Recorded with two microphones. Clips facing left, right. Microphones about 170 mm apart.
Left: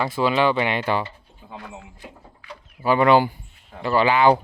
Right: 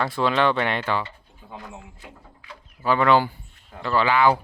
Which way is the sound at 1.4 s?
10° left (ahead or behind).